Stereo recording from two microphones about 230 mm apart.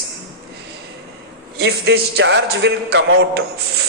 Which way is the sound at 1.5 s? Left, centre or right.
Right.